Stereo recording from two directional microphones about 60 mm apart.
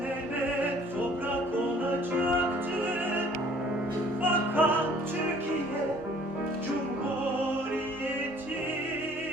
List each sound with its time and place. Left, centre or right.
4.2 s music: right